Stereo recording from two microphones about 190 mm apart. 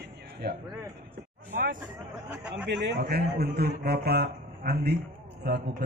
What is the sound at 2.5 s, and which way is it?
Speech, 70° right (ahead or behind).